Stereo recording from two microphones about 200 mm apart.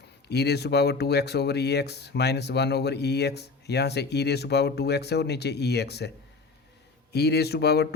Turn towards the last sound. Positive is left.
turn(degrees=55)  # may be behind; listen again after turning